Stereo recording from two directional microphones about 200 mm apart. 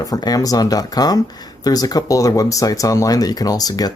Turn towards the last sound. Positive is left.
turn(degrees=20)  # may be behind; listen again after turning